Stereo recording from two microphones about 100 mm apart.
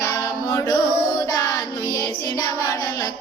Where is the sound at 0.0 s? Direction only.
35° left (ahead or behind).